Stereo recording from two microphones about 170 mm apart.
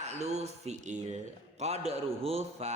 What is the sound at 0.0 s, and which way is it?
A man's voice, 40° right (ahead or behind).